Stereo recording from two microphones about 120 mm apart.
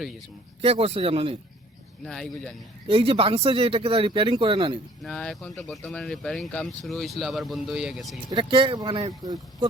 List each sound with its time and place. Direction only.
0.6 s speech: 55° right (ahead or behind)
2.0 s speech: 5° left (ahead or behind)
2.8 s speech: 50° right (ahead or behind)
5.0 s speech: 5° left (ahead or behind)
8.3 s speech: 45° right (ahead or behind)
9.2 s speech: 30° right (ahead or behind)